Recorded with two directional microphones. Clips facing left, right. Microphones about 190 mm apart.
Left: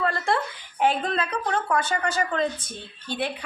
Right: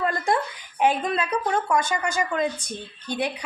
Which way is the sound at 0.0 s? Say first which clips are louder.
Right 1 dB; 15° right (ahead or behind).